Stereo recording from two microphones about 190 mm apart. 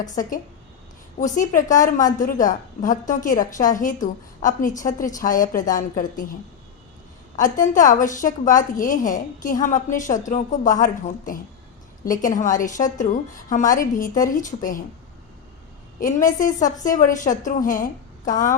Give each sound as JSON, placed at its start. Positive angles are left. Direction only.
{"t": 1.2, "sound": "a woman's voice", "side_deg": 40}
{"t": 7.3, "sound": "a woman's voice", "side_deg": 40}
{"t": 16.0, "sound": "a woman's voice", "side_deg": 45}